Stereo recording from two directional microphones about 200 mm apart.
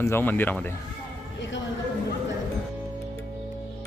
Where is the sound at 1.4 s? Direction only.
65° left (ahead or behind).